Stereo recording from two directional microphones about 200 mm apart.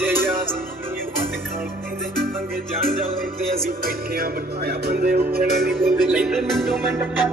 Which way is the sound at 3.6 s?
50° right (ahead or behind).